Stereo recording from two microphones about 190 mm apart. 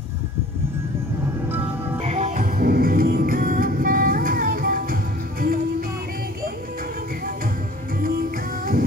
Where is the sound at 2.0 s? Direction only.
35° right (ahead or behind).